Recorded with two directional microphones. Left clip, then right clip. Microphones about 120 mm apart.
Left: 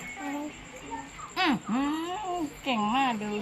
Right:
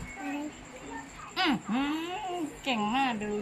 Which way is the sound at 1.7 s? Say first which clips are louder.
Left 2 dB; 30° left (ahead or behind).